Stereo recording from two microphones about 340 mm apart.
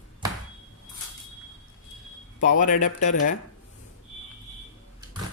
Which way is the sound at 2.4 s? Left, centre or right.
Left.